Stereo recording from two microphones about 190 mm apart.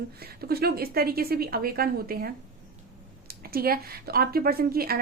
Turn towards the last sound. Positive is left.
turn(degrees=-50)  # may be behind; listen again after turning